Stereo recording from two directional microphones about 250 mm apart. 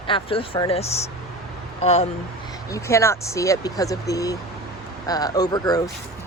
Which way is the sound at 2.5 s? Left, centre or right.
Centre.